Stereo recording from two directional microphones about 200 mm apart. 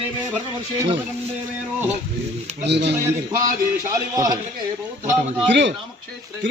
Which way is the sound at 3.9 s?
20° right (ahead or behind).